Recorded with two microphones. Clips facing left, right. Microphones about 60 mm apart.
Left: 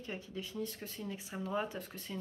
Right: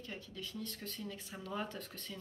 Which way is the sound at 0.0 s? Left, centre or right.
Left.